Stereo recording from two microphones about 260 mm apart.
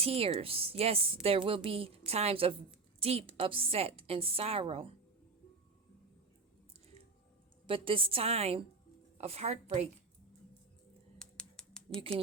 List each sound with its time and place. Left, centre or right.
0.0 s a woman's voice: right
7.7 s a woman's voice: centre
11.2 s a sound: centre